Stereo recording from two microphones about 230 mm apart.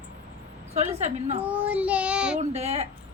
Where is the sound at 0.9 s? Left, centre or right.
Right.